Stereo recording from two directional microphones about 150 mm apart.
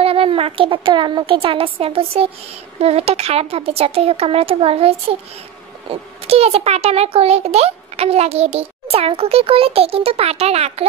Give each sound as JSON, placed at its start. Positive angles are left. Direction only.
{"t": 0.0, "sound": "a child's voice", "side_deg": -40}